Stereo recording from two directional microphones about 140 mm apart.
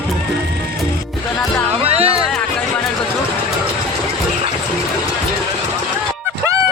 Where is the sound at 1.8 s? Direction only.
45° right (ahead or behind).